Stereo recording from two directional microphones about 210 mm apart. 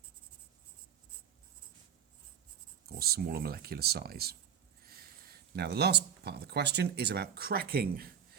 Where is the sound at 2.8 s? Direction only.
45° right (ahead or behind).